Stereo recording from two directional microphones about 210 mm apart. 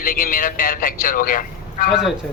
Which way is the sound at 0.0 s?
40° left (ahead or behind).